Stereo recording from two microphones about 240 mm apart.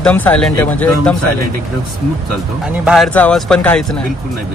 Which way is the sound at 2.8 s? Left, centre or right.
Centre.